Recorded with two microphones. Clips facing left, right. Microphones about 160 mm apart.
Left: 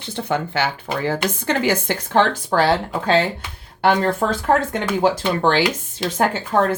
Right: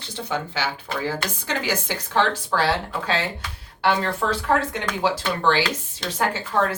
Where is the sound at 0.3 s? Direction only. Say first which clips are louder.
Left 5 dB; 55° left (ahead or behind).